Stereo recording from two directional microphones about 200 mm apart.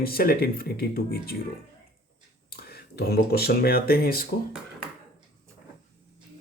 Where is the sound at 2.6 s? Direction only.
50° left (ahead or behind).